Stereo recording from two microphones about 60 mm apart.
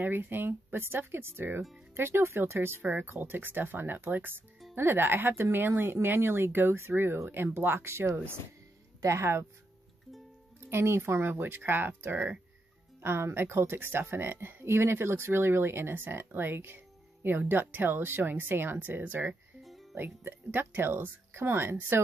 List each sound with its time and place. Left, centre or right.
0.0 s speech: right
2.8 s speech: right
10.6 s speech: right
19.6 s music: centre
20.0 s speech: right